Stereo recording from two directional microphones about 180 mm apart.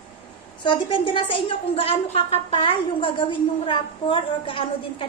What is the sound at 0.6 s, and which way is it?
A woman's voice, 25° left (ahead or behind).